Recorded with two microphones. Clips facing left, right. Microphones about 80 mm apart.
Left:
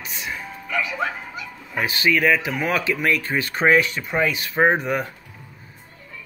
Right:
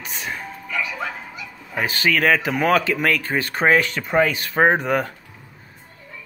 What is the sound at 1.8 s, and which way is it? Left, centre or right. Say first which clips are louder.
Speech: even; right.